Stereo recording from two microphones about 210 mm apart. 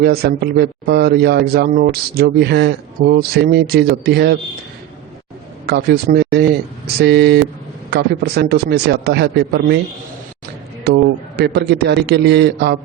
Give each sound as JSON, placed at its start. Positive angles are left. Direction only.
{"t": 0.0, "sound": "speech", "side_deg": -50}
{"t": 5.6, "sound": "speech", "side_deg": -50}
{"t": 10.8, "sound": "speech", "side_deg": -50}